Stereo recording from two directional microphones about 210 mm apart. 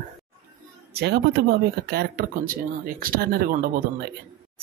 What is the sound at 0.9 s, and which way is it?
A woman's voice, 50° right (ahead or behind).